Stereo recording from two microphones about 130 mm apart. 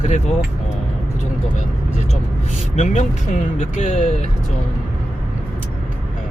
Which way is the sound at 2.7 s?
65° left (ahead or behind).